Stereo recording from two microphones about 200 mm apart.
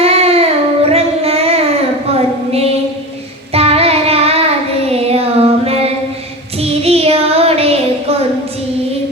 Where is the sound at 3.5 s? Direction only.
30° right (ahead or behind).